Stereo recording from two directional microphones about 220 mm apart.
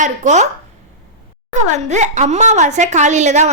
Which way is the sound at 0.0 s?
30° right (ahead or behind).